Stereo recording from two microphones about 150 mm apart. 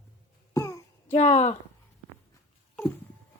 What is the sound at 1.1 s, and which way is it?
Speech, 45° left (ahead or behind).